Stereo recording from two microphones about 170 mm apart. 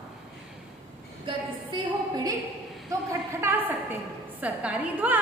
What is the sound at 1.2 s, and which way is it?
A woman's voice, 25° right (ahead or behind).